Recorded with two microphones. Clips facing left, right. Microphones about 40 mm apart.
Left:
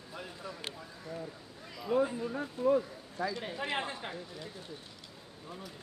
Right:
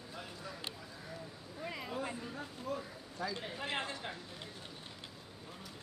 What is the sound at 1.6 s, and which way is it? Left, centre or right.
Speech, right.